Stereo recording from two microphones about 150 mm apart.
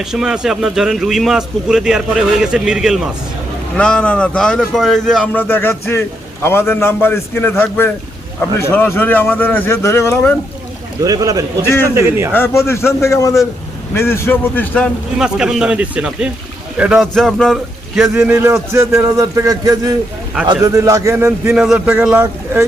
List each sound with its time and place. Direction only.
0.0 s speech: 5° right (ahead or behind); by 10.3 s 15° left (ahead or behind)
11.0 s a man's voice: 25° right (ahead or behind)
11.6 s speech: 15° left (ahead or behind)
11.9 s a man's voice: 15° right (ahead or behind)
12.3 s a man's voice: 15° left (ahead or behind)
15.2 s speech: 5° right (ahead or behind)
18.2 s a man's voice: 15° right (ahead or behind)
21.5 s a man's voice: 5° right (ahead or behind)